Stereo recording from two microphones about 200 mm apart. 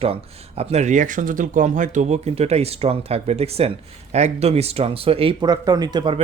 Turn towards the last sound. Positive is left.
turn(degrees=-25)  # may be behind; listen again after turning